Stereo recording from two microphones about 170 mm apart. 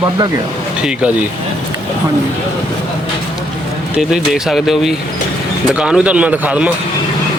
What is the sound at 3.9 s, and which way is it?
A man's voice, 5° right (ahead or behind).